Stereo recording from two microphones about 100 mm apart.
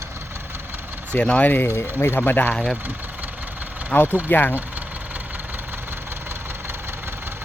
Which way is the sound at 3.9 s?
20° left (ahead or behind).